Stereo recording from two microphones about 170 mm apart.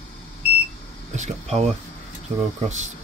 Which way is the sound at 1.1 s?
40° right (ahead or behind).